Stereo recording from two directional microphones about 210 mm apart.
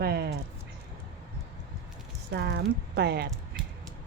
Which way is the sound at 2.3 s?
55° right (ahead or behind).